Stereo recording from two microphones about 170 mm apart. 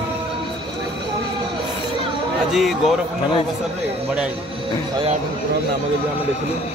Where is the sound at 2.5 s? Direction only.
Centre (ahead or behind).